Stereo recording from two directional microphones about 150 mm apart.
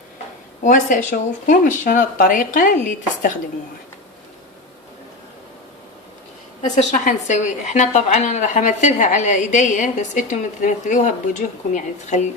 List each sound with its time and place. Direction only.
0.6 s speech: 60° left (ahead or behind)
6.6 s a woman's voice: 55° left (ahead or behind)